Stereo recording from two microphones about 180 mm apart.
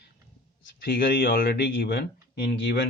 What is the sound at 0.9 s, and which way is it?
Speech, 55° left (ahead or behind).